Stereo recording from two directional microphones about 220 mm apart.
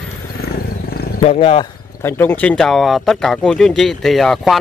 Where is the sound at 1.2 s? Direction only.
25° left (ahead or behind).